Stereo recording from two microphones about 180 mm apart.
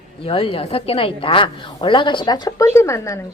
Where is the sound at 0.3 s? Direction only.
30° left (ahead or behind).